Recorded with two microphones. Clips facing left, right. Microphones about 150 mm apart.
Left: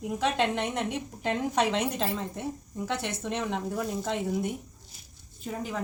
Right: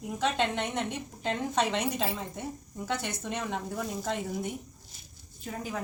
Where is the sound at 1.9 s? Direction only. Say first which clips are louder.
Left 2 dB; 5° right (ahead or behind).